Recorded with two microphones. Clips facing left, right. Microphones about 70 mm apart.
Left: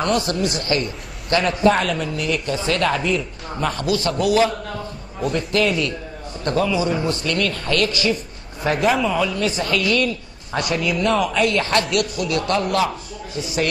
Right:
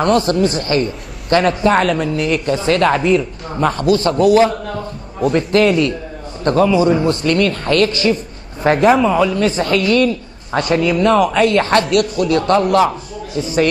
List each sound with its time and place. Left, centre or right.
0.0 s a man's voice: right
1.7 s a man's voice: right